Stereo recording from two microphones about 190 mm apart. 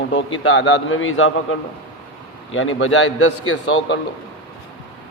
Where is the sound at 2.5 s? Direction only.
90° left.